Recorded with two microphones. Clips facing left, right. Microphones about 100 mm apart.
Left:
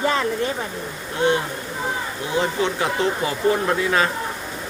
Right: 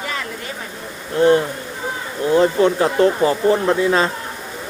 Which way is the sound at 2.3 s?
40° right (ahead or behind).